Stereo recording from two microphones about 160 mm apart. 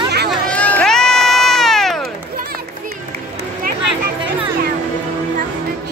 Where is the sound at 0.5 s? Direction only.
5° left (ahead or behind).